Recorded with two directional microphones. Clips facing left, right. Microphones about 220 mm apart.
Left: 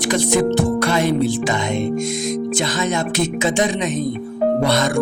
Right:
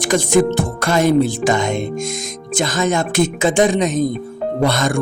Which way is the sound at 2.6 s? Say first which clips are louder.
Right 2 dB; 50° right (ahead or behind).